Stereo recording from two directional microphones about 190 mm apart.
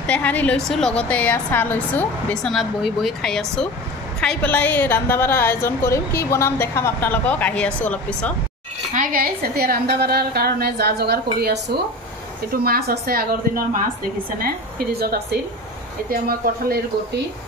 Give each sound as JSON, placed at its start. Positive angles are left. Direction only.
{"t": 0.0, "sound": "a woman's voice", "side_deg": 5}
{"t": 8.9, "sound": "a woman's voice", "side_deg": -45}
{"t": 14.4, "sound": "speech", "side_deg": -55}